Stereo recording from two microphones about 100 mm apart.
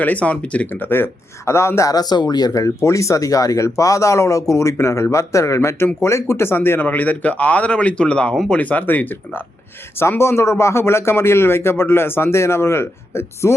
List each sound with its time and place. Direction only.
0.0 s speech: 15° left (ahead or behind)
1.9 s speech: 40° left (ahead or behind); by 13.5 s 25° left (ahead or behind)